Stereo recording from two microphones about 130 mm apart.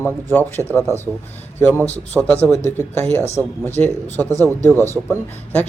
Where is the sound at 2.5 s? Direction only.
25° right (ahead or behind).